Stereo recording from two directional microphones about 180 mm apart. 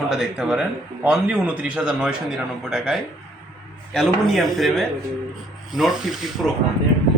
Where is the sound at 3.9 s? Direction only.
Centre (ahead or behind).